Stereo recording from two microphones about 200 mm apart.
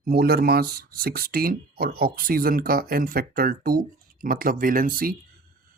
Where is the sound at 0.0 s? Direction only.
50° right (ahead or behind).